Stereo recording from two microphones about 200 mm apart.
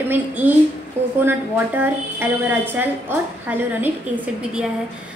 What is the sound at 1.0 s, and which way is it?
Speech, 30° right (ahead or behind).